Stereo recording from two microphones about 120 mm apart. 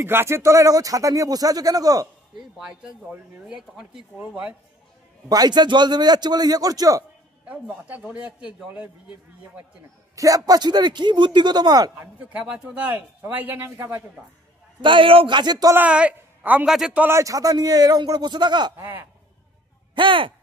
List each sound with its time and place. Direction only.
0.0 s speech: 20° right (ahead or behind)
2.3 s speech: 5° right (ahead or behind)
5.3 s speech: 35° right (ahead or behind)
7.4 s speech: 10° right (ahead or behind)
10.1 s speech: 30° right (ahead or behind)
12.0 s speech: 15° right (ahead or behind)
14.8 s speech: 45° right (ahead or behind)
15.7 s a man's voice: 10° right (ahead or behind)
17.1 s speech: 30° right (ahead or behind)
18.8 s speech: 20° right (ahead or behind)
20.0 s speech: 45° right (ahead or behind)